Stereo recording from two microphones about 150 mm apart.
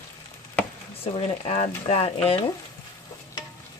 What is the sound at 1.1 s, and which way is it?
Speech, 45° left (ahead or behind).